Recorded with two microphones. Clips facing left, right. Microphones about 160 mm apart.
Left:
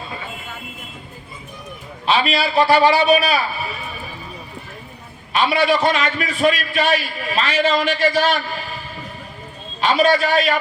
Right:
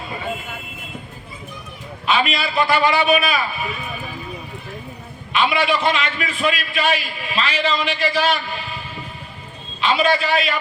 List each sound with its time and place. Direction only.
2.0 s a man's voice: 35° left (ahead or behind)
5.3 s a man's voice: 40° left (ahead or behind)
9.8 s a man's voice: 40° left (ahead or behind)